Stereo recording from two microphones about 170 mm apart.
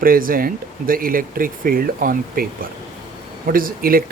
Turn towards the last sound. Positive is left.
turn(degrees=-55)  # may be behind; listen again after turning